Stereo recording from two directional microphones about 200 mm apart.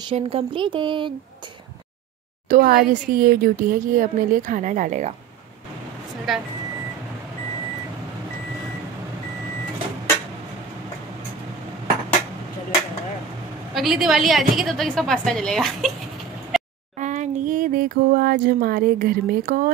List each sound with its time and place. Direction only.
0.1 s speech: 30° right (ahead or behind)
2.5 s speech: 45° right (ahead or behind)
6.3 s a woman's voice: centre (ahead or behind)
13.7 s a woman's voice: centre (ahead or behind)
16.5 s a sound: centre (ahead or behind)
17.0 s a sound: 35° right (ahead or behind)